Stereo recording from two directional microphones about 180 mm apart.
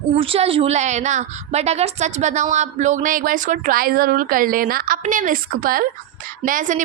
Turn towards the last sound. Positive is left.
turn(degrees=-45)  # may be behind; listen again after turning